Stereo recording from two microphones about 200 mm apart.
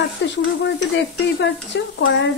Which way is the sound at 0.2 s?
65° left (ahead or behind).